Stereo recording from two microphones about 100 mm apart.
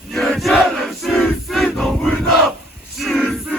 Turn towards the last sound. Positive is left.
turn(degrees=0)  # may be behind; listen again after turning